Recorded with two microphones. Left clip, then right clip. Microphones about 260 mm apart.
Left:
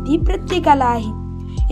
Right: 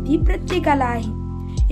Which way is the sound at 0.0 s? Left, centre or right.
Centre.